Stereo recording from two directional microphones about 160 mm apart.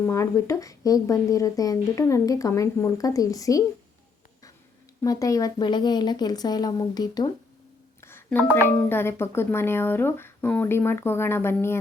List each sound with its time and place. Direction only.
0.0 s speech: 20° left (ahead or behind)
5.0 s speech: 20° left (ahead or behind)
8.0 s a sound: 15° left (ahead or behind)
8.5 s speech: 15° left (ahead or behind)